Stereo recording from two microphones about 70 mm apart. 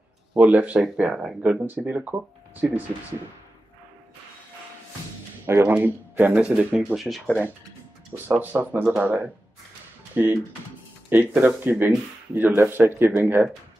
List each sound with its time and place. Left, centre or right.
0.3 s speech: centre
5.5 s speech: right
6.3 s speech: centre
7.0 s speech: centre
8.3 s speech: right